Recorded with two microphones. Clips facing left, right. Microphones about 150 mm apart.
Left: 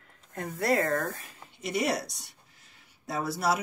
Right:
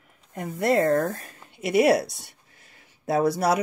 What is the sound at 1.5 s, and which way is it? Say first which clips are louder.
Speech: right 10 dB; 65° right (ahead or behind).